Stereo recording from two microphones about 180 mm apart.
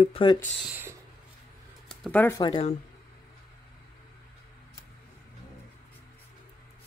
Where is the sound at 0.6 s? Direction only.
10° right (ahead or behind).